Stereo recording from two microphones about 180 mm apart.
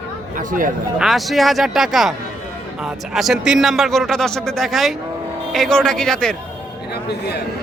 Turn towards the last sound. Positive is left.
turn(degrees=65)  # may be behind; listen again after turning